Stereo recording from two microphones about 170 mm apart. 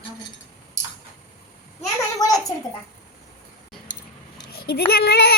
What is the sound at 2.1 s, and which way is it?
Speech, 20° left (ahead or behind).